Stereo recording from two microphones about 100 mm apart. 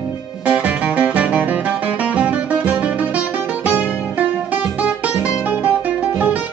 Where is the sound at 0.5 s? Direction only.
15° right (ahead or behind).